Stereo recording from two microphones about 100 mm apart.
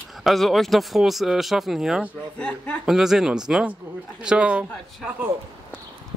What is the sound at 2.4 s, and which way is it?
Speech, 10° left (ahead or behind).